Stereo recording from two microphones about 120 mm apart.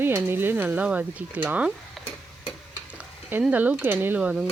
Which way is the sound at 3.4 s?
10° right (ahead or behind).